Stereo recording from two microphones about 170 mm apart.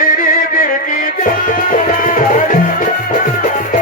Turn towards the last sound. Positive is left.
turn(degrees=50)  # may be behind; listen again after turning